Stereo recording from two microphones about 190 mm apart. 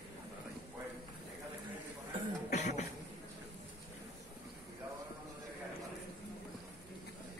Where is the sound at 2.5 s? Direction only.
35° left (ahead or behind).